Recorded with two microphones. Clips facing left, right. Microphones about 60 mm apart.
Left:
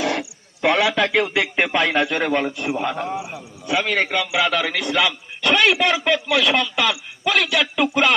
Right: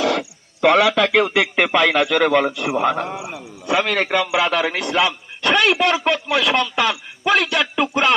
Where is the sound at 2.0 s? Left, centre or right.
Right.